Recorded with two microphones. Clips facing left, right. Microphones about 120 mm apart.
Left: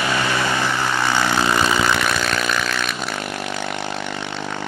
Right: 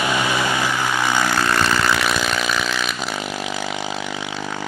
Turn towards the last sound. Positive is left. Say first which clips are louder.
# even
turn(degrees=-5)  # may be behind; listen again after turning